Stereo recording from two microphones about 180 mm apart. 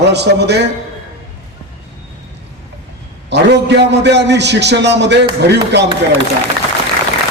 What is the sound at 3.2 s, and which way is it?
A man's voice, 80° right.